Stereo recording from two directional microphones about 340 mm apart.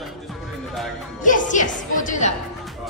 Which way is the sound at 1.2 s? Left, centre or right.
Left.